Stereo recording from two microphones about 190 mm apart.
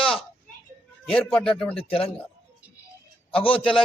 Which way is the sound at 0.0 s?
30° left (ahead or behind).